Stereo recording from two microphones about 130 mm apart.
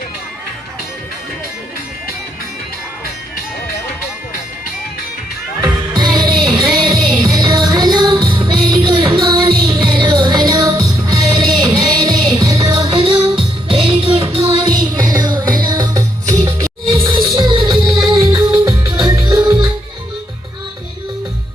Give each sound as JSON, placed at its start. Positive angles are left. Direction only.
{"t": 5.6, "sound": "music", "side_deg": -30}
{"t": 13.7, "sound": "music", "side_deg": -40}
{"t": 14.4, "sound": "music", "side_deg": -30}
{"t": 16.8, "sound": "music", "side_deg": -40}
{"t": 17.2, "sound": "music", "side_deg": -30}